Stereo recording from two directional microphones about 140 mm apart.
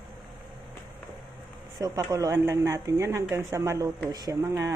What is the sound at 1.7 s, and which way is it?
Speech, 25° right (ahead or behind).